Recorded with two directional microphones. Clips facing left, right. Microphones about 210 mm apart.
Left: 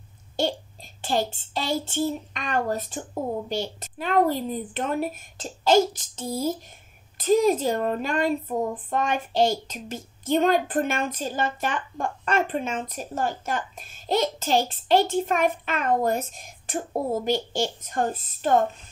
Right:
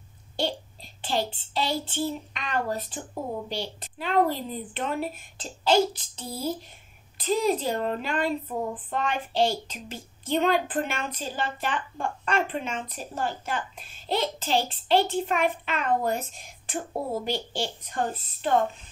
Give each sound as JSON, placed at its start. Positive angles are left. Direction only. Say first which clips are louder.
{"t": 1.0, "sound": "speech", "louder": "left 3 dB", "side_deg": 45}